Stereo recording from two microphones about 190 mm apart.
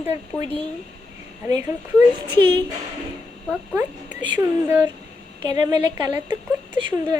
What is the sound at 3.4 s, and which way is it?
Speech, 5° left (ahead or behind).